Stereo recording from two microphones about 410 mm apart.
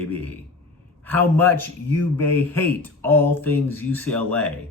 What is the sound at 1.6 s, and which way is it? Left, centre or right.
Speech, right.